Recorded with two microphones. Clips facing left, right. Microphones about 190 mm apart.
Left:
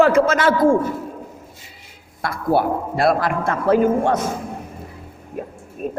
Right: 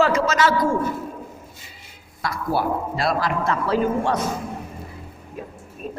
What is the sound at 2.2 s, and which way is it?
A man's voice, 55° left (ahead or behind).